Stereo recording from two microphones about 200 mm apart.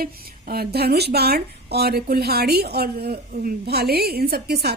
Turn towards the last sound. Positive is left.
turn(degrees=-55)  # may be behind; listen again after turning